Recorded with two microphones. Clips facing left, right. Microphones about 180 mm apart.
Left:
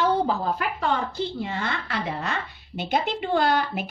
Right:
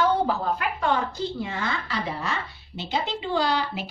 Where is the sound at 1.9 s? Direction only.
55° left (ahead or behind).